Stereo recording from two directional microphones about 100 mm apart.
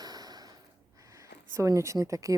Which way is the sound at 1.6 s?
30° right (ahead or behind).